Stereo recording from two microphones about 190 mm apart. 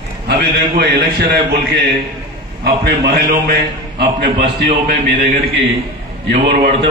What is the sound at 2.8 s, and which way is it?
A man's voice, 60° right (ahead or behind).